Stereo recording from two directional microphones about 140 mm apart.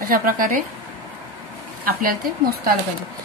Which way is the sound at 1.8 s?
90° right.